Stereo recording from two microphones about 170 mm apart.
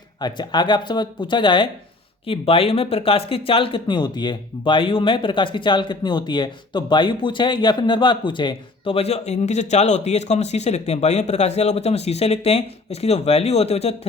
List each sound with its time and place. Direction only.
0.2 s speech: 25° left (ahead or behind)